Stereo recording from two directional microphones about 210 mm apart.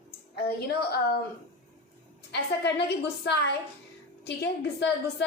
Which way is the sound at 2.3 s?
55° left (ahead or behind).